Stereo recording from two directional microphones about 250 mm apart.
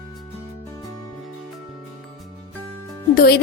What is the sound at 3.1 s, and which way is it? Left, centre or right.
Music, left.